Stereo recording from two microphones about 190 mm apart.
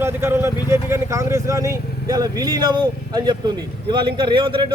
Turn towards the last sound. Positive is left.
turn(degrees=-25)  # may be behind; listen again after turning